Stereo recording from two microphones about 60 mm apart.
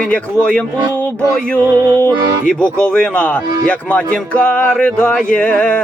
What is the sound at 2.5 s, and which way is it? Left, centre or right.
Speech, centre.